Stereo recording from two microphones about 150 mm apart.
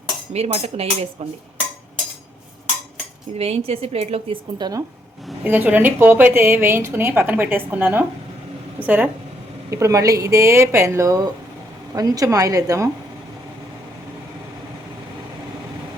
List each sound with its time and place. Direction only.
0.3 s a woman's voice: 45° right (ahead or behind)
3.3 s a woman's voice: 45° right (ahead or behind)
4.5 s speech: 30° right (ahead or behind)
5.2 s a woman's voice: 10° right (ahead or behind)